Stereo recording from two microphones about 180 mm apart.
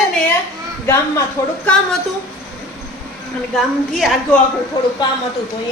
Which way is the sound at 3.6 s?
Centre (ahead or behind).